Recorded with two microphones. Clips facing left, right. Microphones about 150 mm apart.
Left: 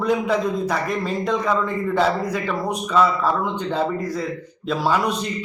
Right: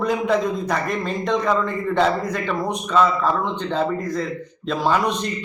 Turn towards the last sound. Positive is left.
turn(degrees=5)  # may be behind; listen again after turning